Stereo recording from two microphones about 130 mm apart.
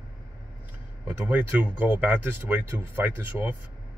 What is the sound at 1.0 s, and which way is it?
Speech, 10° right (ahead or behind).